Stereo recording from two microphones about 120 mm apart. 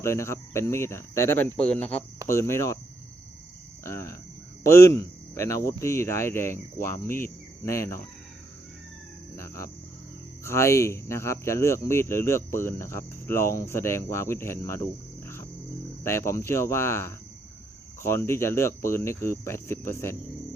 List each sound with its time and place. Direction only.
0.0 s speech: 25° left (ahead or behind)
3.8 s speech: 25° left (ahead or behind)
9.3 s cricket: 25° left (ahead or behind)
10.4 s speech: 20° left (ahead or behind)
16.0 s speech: 20° left (ahead or behind)